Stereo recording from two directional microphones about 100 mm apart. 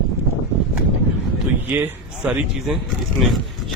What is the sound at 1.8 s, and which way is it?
Speech, 15° right (ahead or behind).